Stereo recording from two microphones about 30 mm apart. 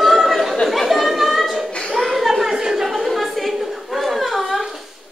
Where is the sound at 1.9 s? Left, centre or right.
Centre.